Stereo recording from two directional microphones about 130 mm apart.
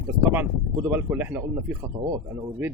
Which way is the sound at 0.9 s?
15° right (ahead or behind).